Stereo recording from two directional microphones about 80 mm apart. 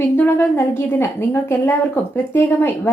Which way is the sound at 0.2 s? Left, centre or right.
Left.